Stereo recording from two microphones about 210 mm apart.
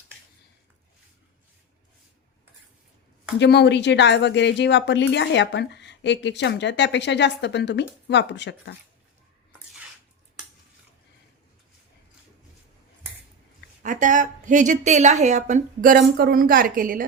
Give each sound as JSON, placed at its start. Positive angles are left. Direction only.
{"t": 3.3, "sound": "speech", "side_deg": 55}
{"t": 13.8, "sound": "speech", "side_deg": -40}